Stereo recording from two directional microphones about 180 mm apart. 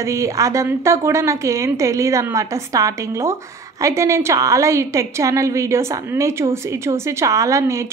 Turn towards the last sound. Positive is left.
turn(degrees=-15)  # may be behind; listen again after turning